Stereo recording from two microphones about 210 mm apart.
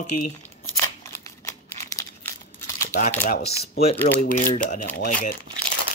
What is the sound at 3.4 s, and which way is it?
Speech, 50° left (ahead or behind).